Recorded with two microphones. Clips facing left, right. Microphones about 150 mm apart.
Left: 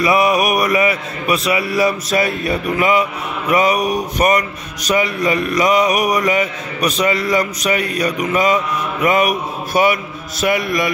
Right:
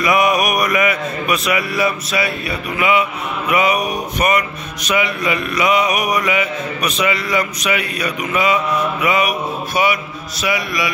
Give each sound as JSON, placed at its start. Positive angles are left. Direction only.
{"t": 0.0, "sound": "a man's voice", "side_deg": 30}